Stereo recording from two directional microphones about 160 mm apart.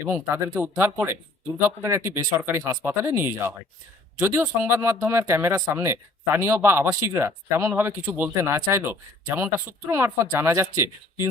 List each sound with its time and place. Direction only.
0.0 s speech: 15° right (ahead or behind)